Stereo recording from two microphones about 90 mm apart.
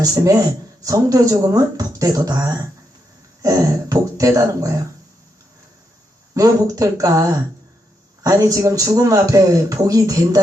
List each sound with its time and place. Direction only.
0.0 s speech: 45° right (ahead or behind)
6.3 s speech: 40° right (ahead or behind)